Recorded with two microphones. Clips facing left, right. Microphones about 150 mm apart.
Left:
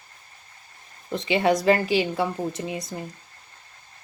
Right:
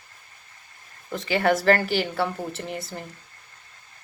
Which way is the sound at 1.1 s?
20° left (ahead or behind).